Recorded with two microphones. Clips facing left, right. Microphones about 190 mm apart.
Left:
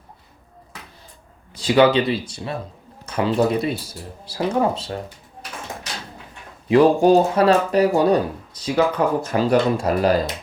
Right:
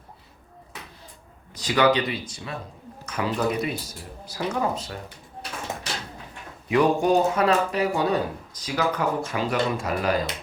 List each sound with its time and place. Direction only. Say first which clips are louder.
1.5 s speech: left 5 dB; 30° left (ahead or behind)
6.7 s speech: left 6 dB; 30° left (ahead or behind)
9.2 s speech: left 7 dB; 40° left (ahead or behind)